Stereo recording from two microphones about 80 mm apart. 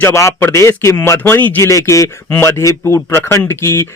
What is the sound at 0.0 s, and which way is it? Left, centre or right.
Speech, left.